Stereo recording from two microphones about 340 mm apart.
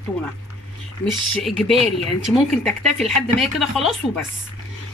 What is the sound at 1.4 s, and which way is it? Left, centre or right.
Speech, centre.